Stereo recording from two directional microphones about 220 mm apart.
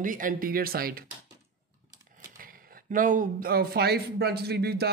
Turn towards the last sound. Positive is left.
turn(degrees=-45)  # may be behind; listen again after turning